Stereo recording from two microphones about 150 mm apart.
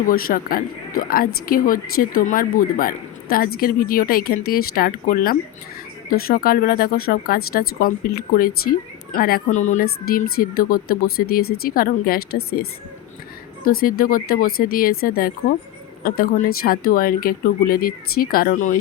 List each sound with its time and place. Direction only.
0.1 s speech: 75° left (ahead or behind)
9.6 s speech: 55° left (ahead or behind)
9.8 s speech: 85° left
13.7 s speech: 70° left (ahead or behind)